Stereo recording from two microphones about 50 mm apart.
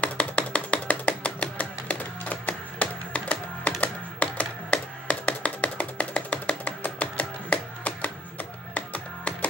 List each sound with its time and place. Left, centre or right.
0.0 s music: left
6.6 s music: left